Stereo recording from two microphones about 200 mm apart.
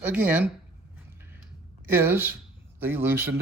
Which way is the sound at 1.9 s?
10° right (ahead or behind).